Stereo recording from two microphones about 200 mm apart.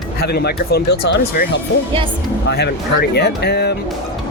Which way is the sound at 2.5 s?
55° left (ahead or behind).